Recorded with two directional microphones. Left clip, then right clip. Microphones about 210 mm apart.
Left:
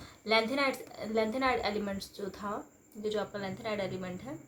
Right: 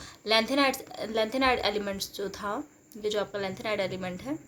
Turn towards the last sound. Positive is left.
turn(degrees=-60)  # may be behind; listen again after turning